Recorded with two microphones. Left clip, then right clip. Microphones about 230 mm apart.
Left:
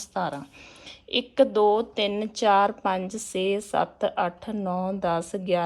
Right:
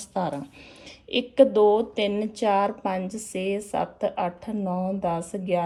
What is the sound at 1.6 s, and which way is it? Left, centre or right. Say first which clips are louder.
A woman's voice: right 1 dB; centre.